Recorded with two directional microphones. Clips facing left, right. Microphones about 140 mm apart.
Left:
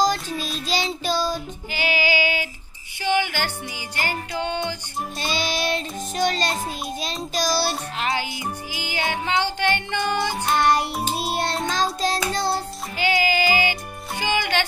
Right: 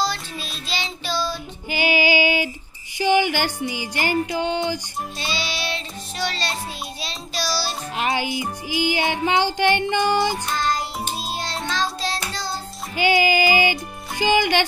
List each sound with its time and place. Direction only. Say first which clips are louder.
0.0 s child singing: left 4 dB; 45° left (ahead or behind)
1.7 s female singing: right 4 dB; 15° right (ahead or behind)
3.2 s music: right 4 dB; 15° right (ahead or behind)
5.2 s music: left 4 dB; 50° left (ahead or behind)
8.0 s music: right 4 dB; 15° right (ahead or behind)
10.5 s child singing: left 4 dB; 65° left (ahead or behind)
11.6 s child singing: left 2 dB; 45° left (ahead or behind)
12.9 s music: right 3 dB; 15° right (ahead or behind)
14.2 s speech: right 5 dB; 15° right (ahead or behind)